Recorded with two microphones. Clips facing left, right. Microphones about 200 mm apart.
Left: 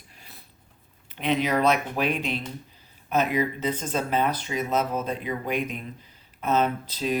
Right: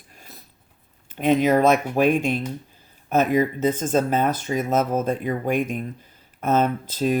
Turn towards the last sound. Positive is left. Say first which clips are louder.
# right 5 dB
turn(degrees=-50)  # may be behind; listen again after turning